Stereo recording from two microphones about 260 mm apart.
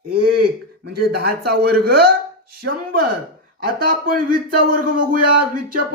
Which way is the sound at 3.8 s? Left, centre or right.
Right.